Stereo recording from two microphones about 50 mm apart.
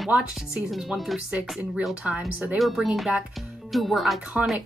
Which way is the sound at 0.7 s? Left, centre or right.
Centre.